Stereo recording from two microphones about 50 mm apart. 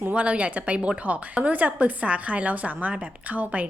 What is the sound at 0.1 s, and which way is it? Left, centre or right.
A woman's voice, right.